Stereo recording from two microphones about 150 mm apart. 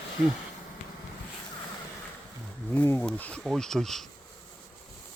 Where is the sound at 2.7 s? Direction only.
15° left (ahead or behind).